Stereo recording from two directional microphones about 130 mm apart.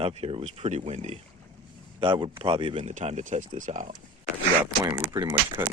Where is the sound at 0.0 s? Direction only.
50° right (ahead or behind).